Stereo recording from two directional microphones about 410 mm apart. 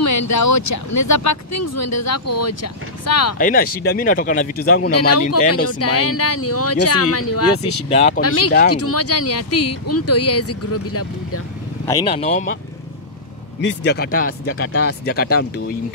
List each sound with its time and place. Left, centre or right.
0.0 s speech: left
3.3 s speech: left
4.9 s speech: left
7.9 s speech: centre
8.2 s speech: left
11.9 s speech: centre
13.6 s speech: left